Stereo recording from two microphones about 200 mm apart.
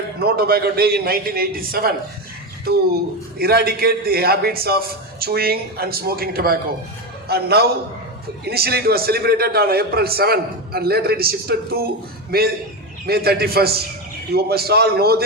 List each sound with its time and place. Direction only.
0.2 s a man's voice: 50° right (ahead or behind)